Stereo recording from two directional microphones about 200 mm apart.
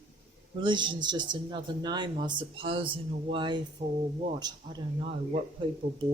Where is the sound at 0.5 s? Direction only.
25° right (ahead or behind).